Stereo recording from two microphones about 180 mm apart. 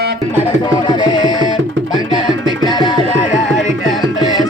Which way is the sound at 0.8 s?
25° left (ahead or behind).